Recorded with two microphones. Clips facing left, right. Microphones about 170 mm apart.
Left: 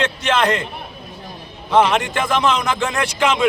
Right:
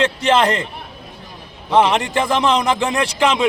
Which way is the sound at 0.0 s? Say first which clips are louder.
Right 3 dB; 35° right (ahead or behind).